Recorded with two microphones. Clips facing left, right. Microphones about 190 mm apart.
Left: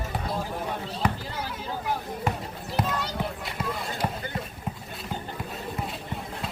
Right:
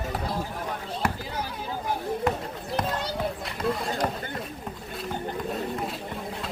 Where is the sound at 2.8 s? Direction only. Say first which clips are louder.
Left 2 dB; 5° left (ahead or behind).